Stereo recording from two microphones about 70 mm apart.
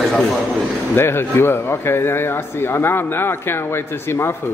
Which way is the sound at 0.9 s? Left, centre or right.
Left.